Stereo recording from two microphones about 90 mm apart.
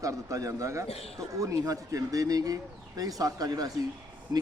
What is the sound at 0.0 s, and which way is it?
A man's voice, 35° right (ahead or behind).